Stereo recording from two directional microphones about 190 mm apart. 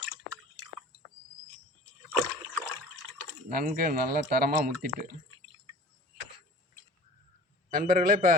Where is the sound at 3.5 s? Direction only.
50° right (ahead or behind).